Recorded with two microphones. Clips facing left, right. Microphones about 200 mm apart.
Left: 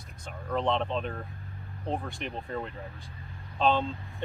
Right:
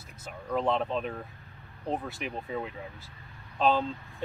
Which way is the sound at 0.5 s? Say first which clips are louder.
Even; 5° right (ahead or behind).